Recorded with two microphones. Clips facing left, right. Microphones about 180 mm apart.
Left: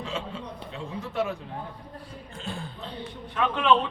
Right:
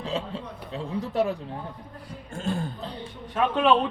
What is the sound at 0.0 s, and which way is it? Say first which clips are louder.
A man's voice: right 3 dB; 35° right (ahead or behind).